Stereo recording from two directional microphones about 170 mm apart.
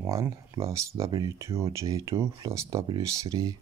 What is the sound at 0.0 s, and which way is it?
Speech, 20° right (ahead or behind).